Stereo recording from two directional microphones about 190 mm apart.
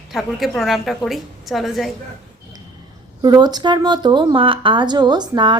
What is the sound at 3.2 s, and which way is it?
Speech, 20° right (ahead or behind).